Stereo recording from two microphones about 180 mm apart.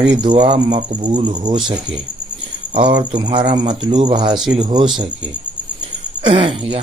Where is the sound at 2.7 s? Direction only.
30° right (ahead or behind).